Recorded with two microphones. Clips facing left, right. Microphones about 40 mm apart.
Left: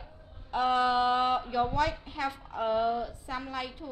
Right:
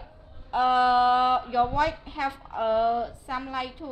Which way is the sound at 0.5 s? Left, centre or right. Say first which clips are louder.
Right 5 dB; centre.